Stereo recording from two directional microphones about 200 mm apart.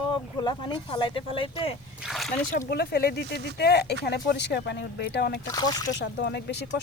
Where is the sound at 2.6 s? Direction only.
50° left (ahead or behind).